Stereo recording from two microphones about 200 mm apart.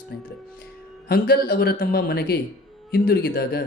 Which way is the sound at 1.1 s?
50° left (ahead or behind).